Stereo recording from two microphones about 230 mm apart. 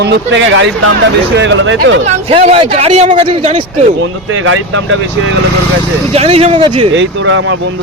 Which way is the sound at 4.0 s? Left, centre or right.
Right.